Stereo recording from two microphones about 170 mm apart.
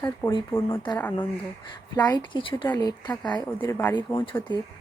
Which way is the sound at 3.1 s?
10° left (ahead or behind).